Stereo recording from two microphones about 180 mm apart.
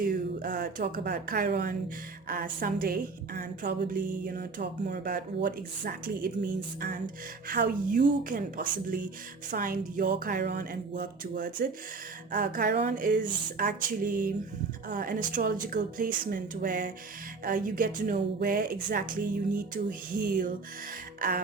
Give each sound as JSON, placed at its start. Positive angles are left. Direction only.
{"t": 0.0, "sound": "a woman's voice", "side_deg": -50}
{"t": 12.8, "sound": "a woman's voice", "side_deg": -45}
{"t": 21.2, "sound": "music", "side_deg": -55}